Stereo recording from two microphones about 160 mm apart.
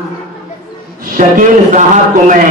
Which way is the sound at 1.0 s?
55° right (ahead or behind).